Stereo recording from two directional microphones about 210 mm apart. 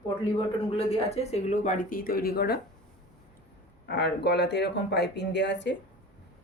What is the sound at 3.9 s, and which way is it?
Speech, 55° left (ahead or behind).